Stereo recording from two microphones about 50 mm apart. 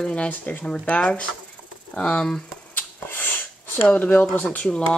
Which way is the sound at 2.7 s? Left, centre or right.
Left.